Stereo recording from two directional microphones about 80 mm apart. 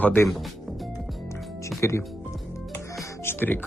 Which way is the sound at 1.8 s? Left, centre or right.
Left.